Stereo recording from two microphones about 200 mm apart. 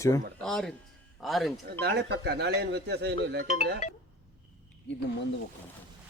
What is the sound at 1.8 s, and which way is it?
Speech, 55° right (ahead or behind).